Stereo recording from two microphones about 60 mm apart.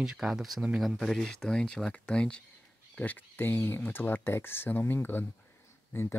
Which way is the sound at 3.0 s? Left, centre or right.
Left.